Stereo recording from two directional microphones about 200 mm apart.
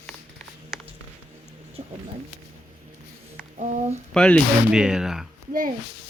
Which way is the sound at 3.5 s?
35° right (ahead or behind).